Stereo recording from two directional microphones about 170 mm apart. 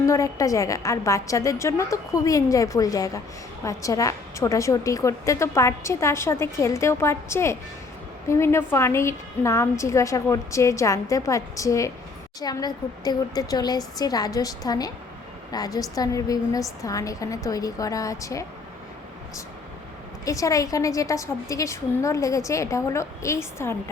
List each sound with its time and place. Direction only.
0.0 s a woman's voice: 20° left (ahead or behind)
20.2 s a woman's voice: 20° left (ahead or behind)